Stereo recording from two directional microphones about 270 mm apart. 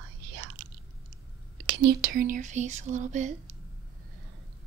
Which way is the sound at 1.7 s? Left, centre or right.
Right.